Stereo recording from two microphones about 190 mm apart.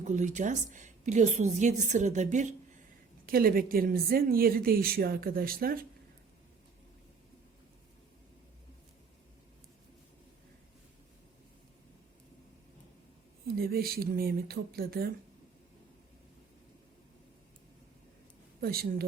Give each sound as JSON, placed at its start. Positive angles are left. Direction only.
{"t": 0.0, "sound": "a woman's voice", "side_deg": -40}
{"t": 3.2, "sound": "a woman's voice", "side_deg": -50}
{"t": 13.6, "sound": "a woman's voice", "side_deg": -55}
{"t": 18.6, "sound": "a woman's voice", "side_deg": -55}